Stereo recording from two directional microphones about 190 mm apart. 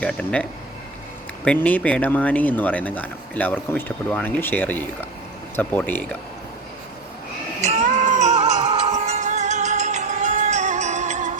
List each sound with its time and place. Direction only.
0.0 s speech: 5° left (ahead or behind)
1.5 s speech: 10° left (ahead or behind)
7.9 s music: 40° right (ahead or behind)
8.5 s music: 20° right (ahead or behind)
8.9 s music: 40° right (ahead or behind)